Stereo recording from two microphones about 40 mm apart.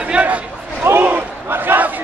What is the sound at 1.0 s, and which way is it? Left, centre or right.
Battle cry, right.